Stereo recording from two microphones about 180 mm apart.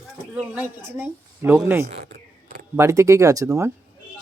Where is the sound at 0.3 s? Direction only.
10° right (ahead or behind).